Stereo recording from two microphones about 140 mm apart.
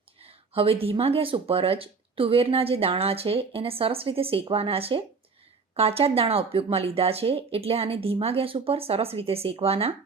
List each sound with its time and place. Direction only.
0.2 s speech: 45° right (ahead or behind)